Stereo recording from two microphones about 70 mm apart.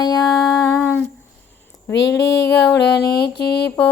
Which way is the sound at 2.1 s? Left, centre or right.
Left.